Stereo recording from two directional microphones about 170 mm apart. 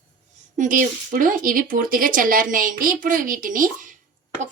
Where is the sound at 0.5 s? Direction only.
50° right (ahead or behind).